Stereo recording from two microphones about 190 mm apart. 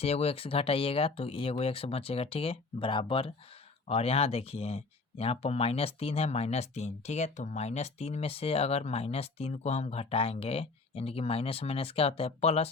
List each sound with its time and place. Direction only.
0.0 s speech: 30° left (ahead or behind)